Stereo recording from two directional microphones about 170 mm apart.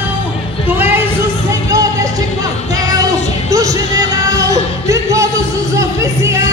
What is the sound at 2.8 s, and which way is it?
Music, 20° right (ahead or behind).